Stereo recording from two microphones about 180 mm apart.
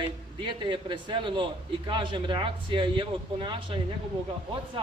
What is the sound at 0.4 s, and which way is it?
A man's voice, 25° right (ahead or behind).